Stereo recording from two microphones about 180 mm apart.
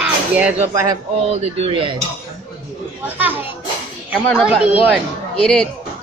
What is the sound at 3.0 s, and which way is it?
Speech, 10° right (ahead or behind).